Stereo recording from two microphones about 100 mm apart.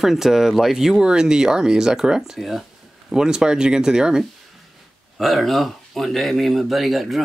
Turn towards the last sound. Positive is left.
turn(degrees=0)  # may be behind; listen again after turning